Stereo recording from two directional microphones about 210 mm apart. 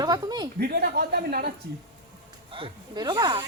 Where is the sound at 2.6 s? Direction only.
20° right (ahead or behind).